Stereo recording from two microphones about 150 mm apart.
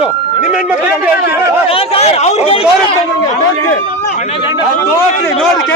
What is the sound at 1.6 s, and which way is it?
Speech, 40° left (ahead or behind).